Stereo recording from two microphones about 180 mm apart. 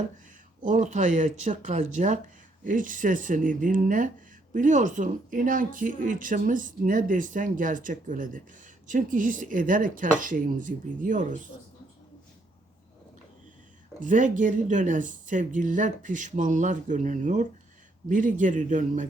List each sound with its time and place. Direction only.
0.6 s speech: 45° right (ahead or behind)
14.0 s speech: 45° right (ahead or behind)